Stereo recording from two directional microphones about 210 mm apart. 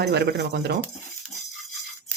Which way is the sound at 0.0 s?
50° right (ahead or behind).